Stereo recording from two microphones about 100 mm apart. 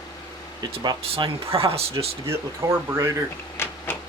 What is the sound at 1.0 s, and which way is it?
Speech, 75° right (ahead or behind).